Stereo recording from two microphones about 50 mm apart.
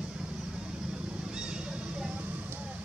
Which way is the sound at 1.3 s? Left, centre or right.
Centre.